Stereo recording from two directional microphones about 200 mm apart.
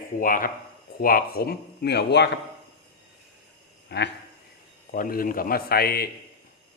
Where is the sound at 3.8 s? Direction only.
55° left (ahead or behind).